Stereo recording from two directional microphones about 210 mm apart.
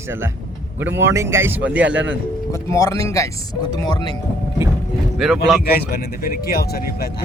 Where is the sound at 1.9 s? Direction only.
60° right (ahead or behind).